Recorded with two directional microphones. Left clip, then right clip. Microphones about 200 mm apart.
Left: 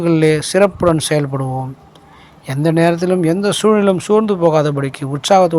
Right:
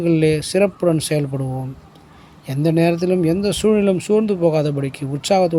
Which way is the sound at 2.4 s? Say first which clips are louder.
Left 4 dB; 15° right (ahead or behind).